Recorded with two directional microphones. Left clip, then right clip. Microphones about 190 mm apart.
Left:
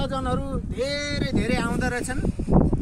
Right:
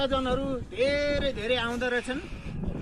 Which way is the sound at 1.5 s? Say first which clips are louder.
Left 1 dB; 10° left (ahead or behind).